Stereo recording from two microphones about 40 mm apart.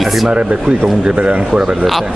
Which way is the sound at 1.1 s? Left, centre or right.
Right.